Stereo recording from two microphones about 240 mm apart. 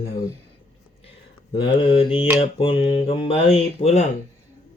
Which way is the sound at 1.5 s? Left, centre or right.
Left.